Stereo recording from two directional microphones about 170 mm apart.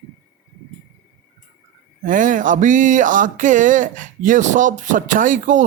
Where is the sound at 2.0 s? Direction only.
50° right (ahead or behind).